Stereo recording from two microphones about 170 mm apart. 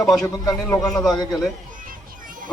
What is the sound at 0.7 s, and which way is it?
Speech, 20° left (ahead or behind).